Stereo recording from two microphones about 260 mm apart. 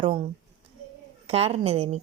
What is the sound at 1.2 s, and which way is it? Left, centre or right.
Speech, right.